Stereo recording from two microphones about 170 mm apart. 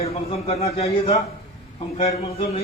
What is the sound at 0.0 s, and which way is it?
A man's voice, 35° left (ahead or behind).